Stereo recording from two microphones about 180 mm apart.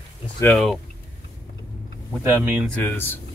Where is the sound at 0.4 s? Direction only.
15° left (ahead or behind).